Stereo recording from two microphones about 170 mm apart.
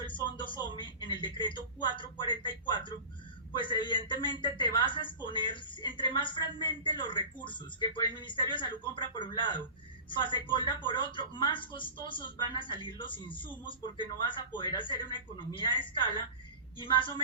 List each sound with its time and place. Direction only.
0.0 s a woman's voice: 30° left (ahead or behind)